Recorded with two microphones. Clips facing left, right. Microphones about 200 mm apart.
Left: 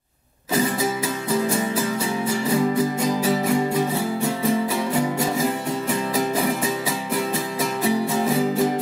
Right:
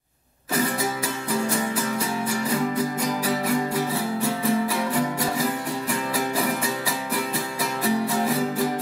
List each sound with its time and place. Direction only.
3.2 s music: 25° left (ahead or behind)
7.8 s music: 20° left (ahead or behind)